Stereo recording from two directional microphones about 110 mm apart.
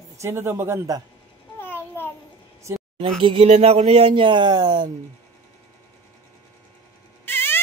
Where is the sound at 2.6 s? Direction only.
25° right (ahead or behind).